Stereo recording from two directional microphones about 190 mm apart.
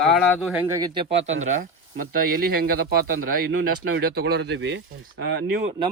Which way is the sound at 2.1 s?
50° right (ahead or behind).